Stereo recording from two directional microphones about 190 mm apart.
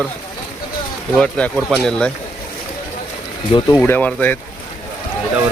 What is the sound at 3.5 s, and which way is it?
Speech, 25° left (ahead or behind).